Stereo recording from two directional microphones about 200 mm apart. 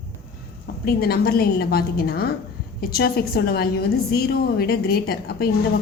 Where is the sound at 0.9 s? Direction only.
50° left (ahead or behind).